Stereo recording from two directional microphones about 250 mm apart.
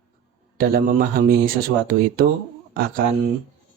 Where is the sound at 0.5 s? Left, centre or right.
Right.